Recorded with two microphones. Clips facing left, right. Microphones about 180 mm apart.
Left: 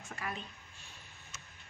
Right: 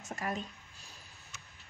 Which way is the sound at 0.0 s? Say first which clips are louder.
Right 5 dB; 40° right (ahead or behind).